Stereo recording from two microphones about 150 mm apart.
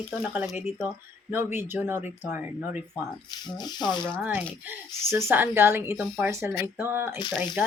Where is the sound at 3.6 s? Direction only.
30° left (ahead or behind).